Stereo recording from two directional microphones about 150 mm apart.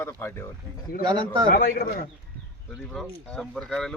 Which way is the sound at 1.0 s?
30° right (ahead or behind).